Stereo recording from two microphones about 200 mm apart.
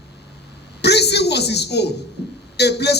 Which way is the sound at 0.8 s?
55° left (ahead or behind).